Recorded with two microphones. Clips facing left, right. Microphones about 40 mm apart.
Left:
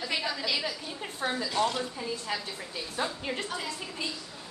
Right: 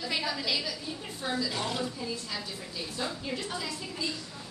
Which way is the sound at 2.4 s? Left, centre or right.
Left.